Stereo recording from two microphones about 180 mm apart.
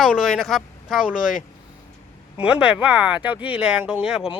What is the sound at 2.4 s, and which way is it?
Speech, 5° right (ahead or behind).